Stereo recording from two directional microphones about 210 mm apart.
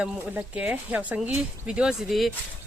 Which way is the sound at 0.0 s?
5° right (ahead or behind).